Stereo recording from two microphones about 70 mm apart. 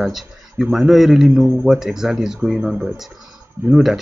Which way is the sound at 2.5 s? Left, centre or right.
Centre.